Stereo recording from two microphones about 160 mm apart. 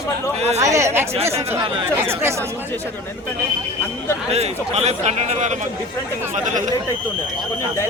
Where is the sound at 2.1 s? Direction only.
15° right (ahead or behind).